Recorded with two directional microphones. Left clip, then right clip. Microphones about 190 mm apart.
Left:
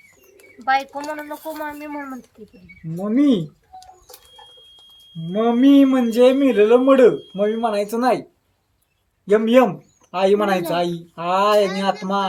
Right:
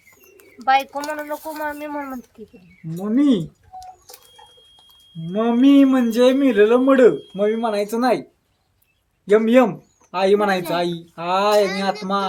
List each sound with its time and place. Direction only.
0.3 s bird: 25° right (ahead or behind)
0.8 s speech: 30° right (ahead or behind)
3.0 s bird: 10° left (ahead or behind)
5.2 s speech: 10° left (ahead or behind)
9.3 s speech: 15° left (ahead or behind)